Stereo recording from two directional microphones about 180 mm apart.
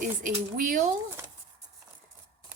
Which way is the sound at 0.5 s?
50° right (ahead or behind).